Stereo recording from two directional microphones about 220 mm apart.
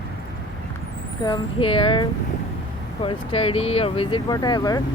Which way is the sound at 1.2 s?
20° left (ahead or behind).